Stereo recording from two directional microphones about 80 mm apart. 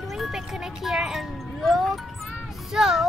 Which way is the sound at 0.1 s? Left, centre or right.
Centre.